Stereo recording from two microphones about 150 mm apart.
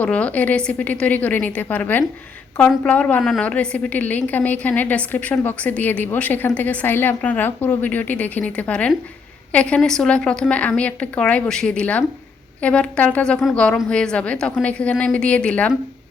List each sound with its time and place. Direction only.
0.0 s a woman's voice: 10° left (ahead or behind)